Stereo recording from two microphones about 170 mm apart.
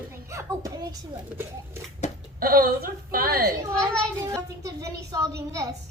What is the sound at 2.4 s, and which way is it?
A woman's voice, 60° right (ahead or behind).